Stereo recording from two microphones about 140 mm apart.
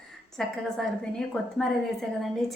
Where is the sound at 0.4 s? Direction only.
5° left (ahead or behind).